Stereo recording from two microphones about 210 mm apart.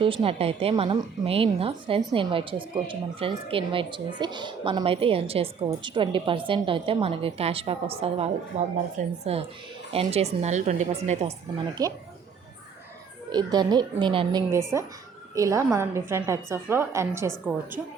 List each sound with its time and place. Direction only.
0.0 s a woman's voice: 25° right (ahead or behind)
11.7 s a woman's voice: 15° right (ahead or behind)
13.3 s a woman's voice: 20° right (ahead or behind)
14.5 s a woman's voice: 15° right (ahead or behind)